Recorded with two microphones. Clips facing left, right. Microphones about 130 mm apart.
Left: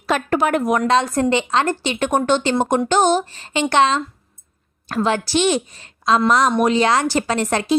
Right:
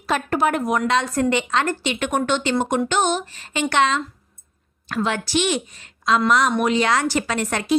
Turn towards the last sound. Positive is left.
turn(degrees=30)  # may be behind; listen again after turning